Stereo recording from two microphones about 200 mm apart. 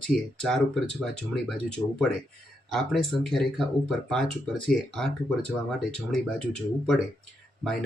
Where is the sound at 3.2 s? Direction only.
Centre (ahead or behind).